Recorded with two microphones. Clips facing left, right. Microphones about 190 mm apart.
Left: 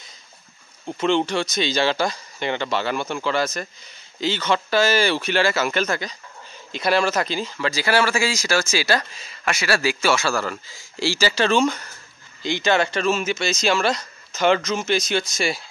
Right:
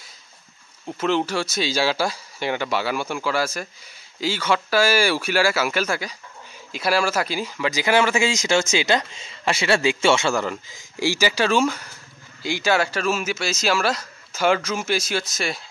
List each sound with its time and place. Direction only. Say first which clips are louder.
0.8 s speech: left 2 dB; 5° right (ahead or behind)